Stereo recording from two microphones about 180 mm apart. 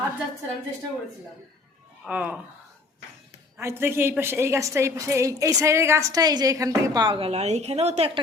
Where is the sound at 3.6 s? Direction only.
15° right (ahead or behind); by 8.2 s 35° right (ahead or behind).